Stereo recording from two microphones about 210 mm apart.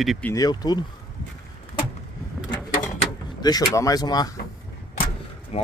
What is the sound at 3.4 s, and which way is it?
Speech, 20° left (ahead or behind).